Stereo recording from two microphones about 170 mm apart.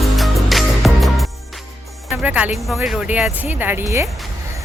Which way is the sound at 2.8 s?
5° right (ahead or behind).